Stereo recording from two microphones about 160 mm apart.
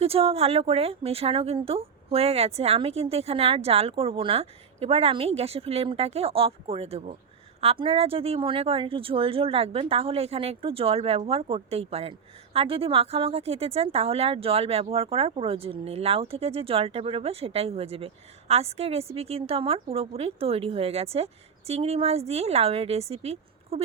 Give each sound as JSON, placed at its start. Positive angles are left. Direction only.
{"t": 0.0, "sound": "speech", "side_deg": -35}